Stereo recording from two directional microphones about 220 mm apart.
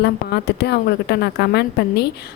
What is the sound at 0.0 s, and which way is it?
A woman's voice, 50° left (ahead or behind).